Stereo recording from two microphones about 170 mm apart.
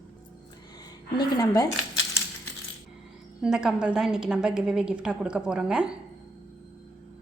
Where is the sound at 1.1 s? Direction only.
20° left (ahead or behind).